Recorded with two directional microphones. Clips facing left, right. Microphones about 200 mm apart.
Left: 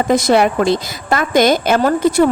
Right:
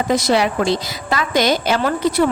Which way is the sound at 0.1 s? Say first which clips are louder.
Left 4 dB; 50° left (ahead or behind).